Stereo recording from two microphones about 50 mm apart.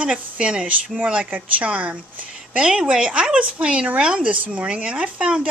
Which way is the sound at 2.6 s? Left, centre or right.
Centre.